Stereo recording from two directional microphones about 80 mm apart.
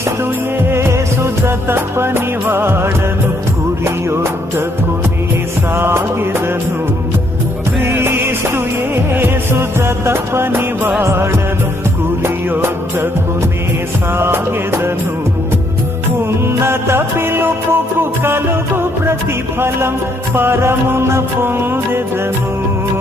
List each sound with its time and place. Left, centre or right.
0.7 s music: right
5.7 s music: right
7.8 s music: right
14.2 s music: right
16.6 s music: right
19.5 s music: right